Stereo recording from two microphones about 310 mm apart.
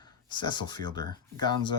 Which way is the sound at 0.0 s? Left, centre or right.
Centre.